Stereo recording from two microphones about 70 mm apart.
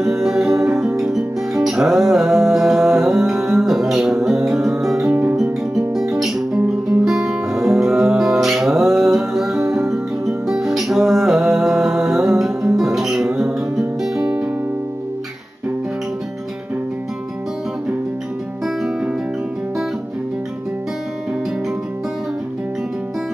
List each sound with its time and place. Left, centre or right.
0.0 s music: centre
14.2 s music: right
18.8 s music: centre